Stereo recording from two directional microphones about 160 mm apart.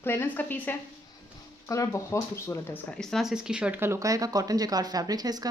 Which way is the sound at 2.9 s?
Centre (ahead or behind).